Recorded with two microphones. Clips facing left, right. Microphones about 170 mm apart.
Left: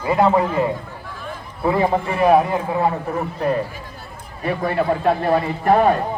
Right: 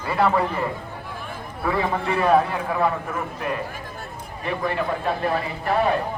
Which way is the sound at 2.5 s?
30° left (ahead or behind).